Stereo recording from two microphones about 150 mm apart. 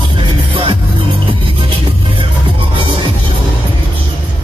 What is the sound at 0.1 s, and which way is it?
Music, 35° right (ahead or behind).